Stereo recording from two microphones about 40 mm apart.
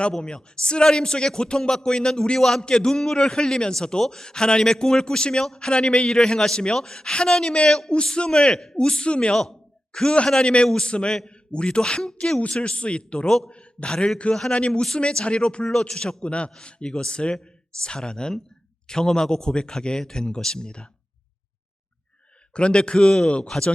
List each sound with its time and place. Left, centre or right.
0.2 s a man's voice: left
9.3 s a man's voice: centre
11.8 s a man's voice: centre
13.5 s a sound: left
14.2 s a man's voice: left
22.5 s speech: left